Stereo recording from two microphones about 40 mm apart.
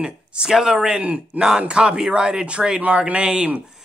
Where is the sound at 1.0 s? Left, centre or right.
Right.